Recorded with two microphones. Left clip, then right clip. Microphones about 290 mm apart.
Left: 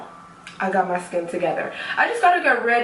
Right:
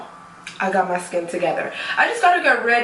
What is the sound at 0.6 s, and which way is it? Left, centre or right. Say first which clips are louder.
A woman's voice: right 1 dB; centre.